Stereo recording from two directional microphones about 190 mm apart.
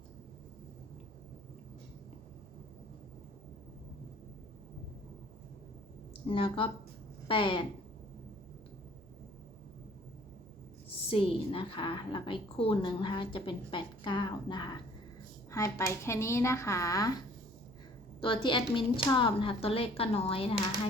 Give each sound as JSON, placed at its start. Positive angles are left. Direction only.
{"t": 6.2, "sound": "a woman's voice", "side_deg": 30}
{"t": 11.1, "sound": "a woman's voice", "side_deg": 30}
{"t": 18.2, "sound": "a woman's voice", "side_deg": 25}